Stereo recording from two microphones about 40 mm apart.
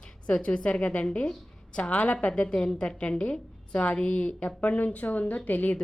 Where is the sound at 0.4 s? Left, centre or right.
Left.